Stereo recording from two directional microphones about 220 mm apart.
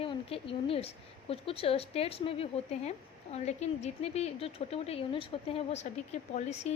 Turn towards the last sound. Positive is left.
turn(degrees=30)  # may be behind; listen again after turning